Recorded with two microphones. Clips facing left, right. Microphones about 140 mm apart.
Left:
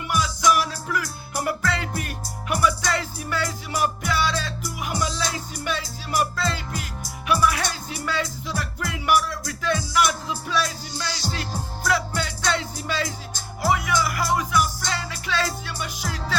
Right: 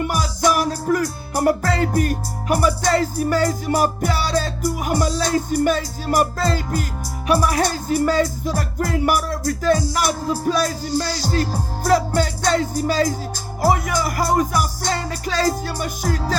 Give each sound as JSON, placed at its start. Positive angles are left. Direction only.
{"t": 0.0, "sound": "music", "side_deg": -40}